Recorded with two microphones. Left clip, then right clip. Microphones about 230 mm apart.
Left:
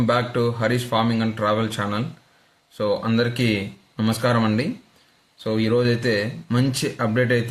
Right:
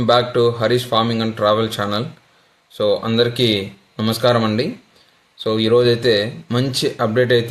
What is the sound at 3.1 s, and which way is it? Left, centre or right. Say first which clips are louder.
Speech: right 6 dB; centre.